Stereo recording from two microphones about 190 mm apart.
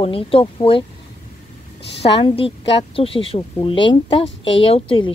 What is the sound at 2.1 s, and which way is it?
Speech, 30° left (ahead or behind).